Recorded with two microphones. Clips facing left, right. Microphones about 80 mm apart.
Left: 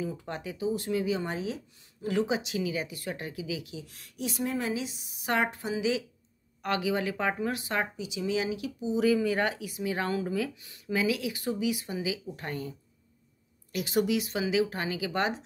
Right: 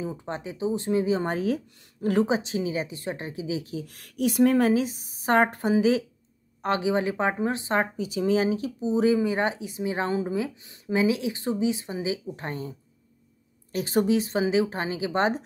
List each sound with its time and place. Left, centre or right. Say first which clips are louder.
0.0 s speech: right 3 dB; right
1.3 s a woman's voice: right 8 dB; right
2.2 s speech: right 4 dB; right
3.7 s a woman's voice: right 8 dB; right
6.6 s speech: right 4 dB; right